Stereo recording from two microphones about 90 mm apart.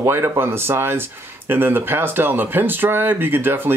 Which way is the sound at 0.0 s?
30° right (ahead or behind).